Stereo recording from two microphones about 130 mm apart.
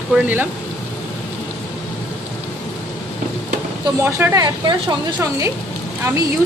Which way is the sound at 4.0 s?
20° right (ahead or behind).